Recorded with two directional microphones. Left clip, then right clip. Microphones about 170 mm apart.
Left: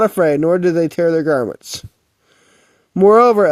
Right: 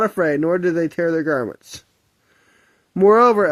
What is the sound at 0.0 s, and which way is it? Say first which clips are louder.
Speech: left 5 dB; 30° left (ahead or behind).